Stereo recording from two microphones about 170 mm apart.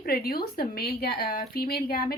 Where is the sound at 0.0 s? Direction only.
60° left (ahead or behind).